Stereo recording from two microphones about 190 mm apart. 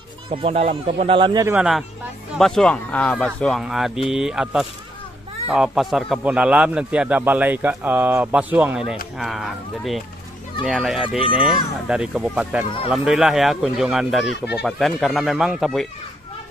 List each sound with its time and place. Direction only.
0.3 s speech: 30° right (ahead or behind)
1.4 s a man's voice: 5° right (ahead or behind)
11.1 s speech: 30° left (ahead or behind)
11.4 s speech: 5° right (ahead or behind)